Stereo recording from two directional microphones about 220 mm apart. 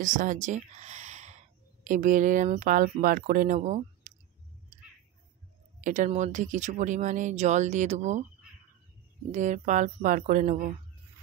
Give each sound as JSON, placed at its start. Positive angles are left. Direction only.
{"t": 0.0, "sound": "speech", "side_deg": -35}
{"t": 5.8, "sound": "speech", "side_deg": -35}
{"t": 9.3, "sound": "speech", "side_deg": -35}